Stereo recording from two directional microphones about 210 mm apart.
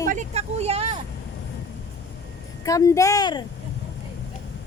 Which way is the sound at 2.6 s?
15° left (ahead or behind).